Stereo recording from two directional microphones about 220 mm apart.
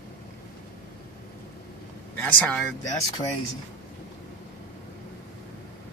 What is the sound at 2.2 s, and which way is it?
Speech, 10° left (ahead or behind).